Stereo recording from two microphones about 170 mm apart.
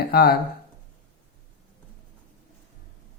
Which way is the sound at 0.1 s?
65° left (ahead or behind).